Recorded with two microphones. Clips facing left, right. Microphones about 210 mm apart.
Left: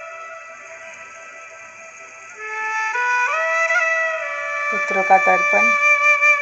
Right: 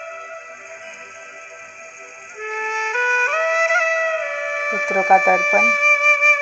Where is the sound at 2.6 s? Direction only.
40° right (ahead or behind).